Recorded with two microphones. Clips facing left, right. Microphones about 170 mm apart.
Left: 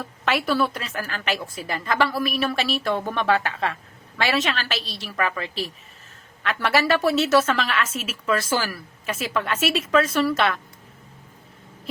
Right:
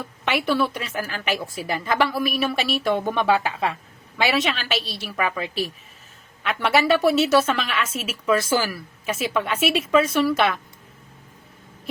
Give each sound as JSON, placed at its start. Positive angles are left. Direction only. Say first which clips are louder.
{"t": 0.0, "sound": "a woman's voice", "louder": "even", "side_deg": 0}
{"t": 6.7, "sound": "a woman's voice", "louder": "right 2 dB", "side_deg": 0}